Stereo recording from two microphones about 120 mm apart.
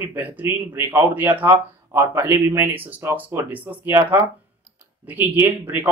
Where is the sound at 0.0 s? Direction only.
15° right (ahead or behind).